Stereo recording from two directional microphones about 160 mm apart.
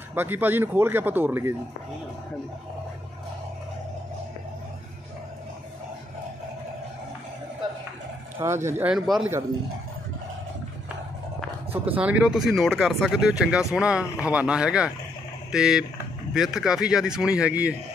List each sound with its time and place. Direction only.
0.1 s speech: 10° right (ahead or behind)
8.4 s speech: 15° right (ahead or behind)
8.9 s speech: centre (ahead or behind)
11.7 s speech: 10° right (ahead or behind)